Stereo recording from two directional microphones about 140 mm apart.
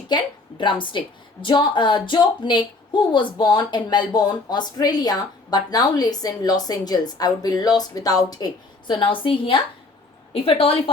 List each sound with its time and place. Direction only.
0.1 s speech: 30° left (ahead or behind)